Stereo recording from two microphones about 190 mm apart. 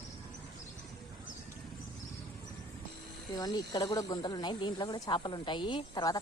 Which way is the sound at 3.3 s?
20° left (ahead or behind).